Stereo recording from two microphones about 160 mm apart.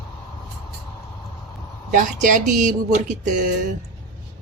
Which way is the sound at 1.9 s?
50° right (ahead or behind).